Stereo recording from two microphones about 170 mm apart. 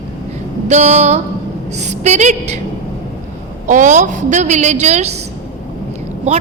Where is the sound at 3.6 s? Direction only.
50° right (ahead or behind).